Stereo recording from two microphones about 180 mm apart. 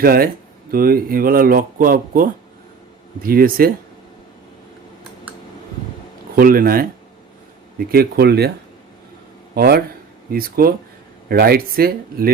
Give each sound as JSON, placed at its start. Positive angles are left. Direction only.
{"t": 0.0, "sound": "speech", "side_deg": -55}
{"t": 6.3, "sound": "speech", "side_deg": -55}
{"t": 7.9, "sound": "speech", "side_deg": -60}
{"t": 9.6, "sound": "speech", "side_deg": -60}